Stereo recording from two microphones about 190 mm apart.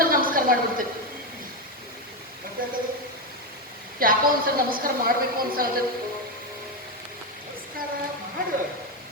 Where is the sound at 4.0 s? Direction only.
50° right (ahead or behind).